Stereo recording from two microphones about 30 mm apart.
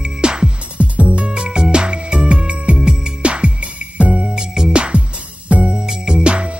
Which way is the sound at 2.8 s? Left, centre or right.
Right.